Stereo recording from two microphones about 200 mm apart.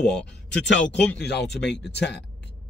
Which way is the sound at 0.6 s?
65° left (ahead or behind).